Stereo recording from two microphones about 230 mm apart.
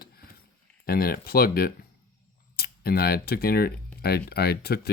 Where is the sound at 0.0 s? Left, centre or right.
Left.